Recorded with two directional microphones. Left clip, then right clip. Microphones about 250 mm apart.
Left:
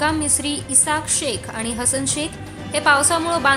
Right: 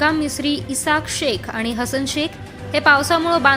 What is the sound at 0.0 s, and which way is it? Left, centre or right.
A woman's voice, centre.